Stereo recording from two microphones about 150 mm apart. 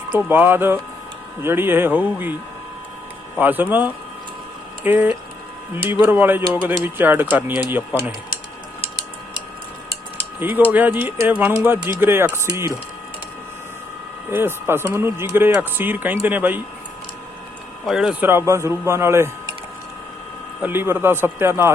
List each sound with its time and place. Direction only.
0.1 s speech: 10° right (ahead or behind)
3.3 s speech: 10° right (ahead or behind)
10.4 s speech: 10° right (ahead or behind)
14.3 s speech: 15° right (ahead or behind)
17.8 s speech: 5° right (ahead or behind)
20.6 s speech: 15° right (ahead or behind)